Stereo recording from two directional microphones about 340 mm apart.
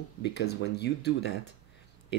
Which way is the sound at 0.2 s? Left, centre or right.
Left.